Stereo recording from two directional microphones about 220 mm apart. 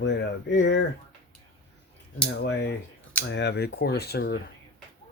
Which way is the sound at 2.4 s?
50° left (ahead or behind).